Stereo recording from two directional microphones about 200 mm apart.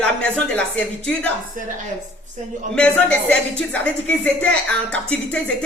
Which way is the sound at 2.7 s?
5° left (ahead or behind).